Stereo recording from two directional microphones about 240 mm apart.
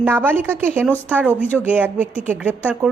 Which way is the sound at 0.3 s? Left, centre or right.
Centre.